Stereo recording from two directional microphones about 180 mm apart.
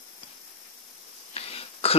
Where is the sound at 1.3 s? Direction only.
35° left (ahead or behind).